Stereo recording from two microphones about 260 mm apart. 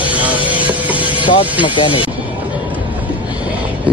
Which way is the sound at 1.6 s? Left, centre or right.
Centre.